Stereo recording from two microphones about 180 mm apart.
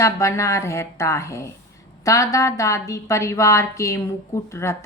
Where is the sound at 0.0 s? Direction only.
15° left (ahead or behind).